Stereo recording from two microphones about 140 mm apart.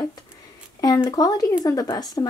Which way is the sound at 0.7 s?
25° left (ahead or behind).